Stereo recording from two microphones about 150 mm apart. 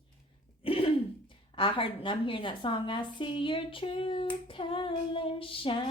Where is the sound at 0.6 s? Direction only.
40° left (ahead or behind).